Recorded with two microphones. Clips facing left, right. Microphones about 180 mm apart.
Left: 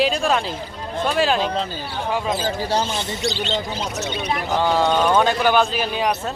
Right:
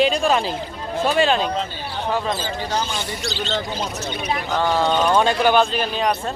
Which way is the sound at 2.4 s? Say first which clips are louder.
Left 3 dB; 35° left (ahead or behind).